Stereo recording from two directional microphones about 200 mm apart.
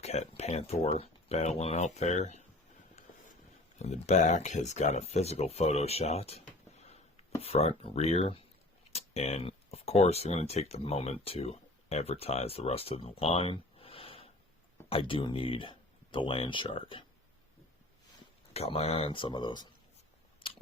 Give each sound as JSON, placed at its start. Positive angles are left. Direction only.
{"t": 0.0, "sound": "speech", "side_deg": 35}
{"t": 3.8, "sound": "speech", "side_deg": 35}
{"t": 18.5, "sound": "speech", "side_deg": 30}